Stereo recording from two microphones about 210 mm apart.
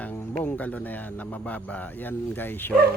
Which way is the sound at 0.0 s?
10° left (ahead or behind).